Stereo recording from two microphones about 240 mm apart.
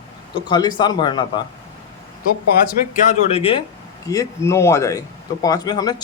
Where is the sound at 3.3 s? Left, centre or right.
Left.